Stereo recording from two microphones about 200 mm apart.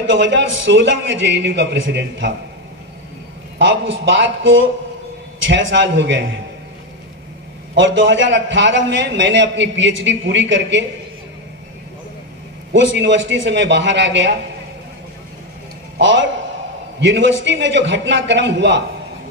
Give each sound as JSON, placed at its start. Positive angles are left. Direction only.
{"t": 0.0, "sound": "a man's voice", "side_deg": -65}
{"t": 3.5, "sound": "a man's voice", "side_deg": -65}
{"t": 7.7, "sound": "a man's voice", "side_deg": -65}
{"t": 12.7, "sound": "a man's voice", "side_deg": -65}
{"t": 17.0, "sound": "a man's voice", "side_deg": -65}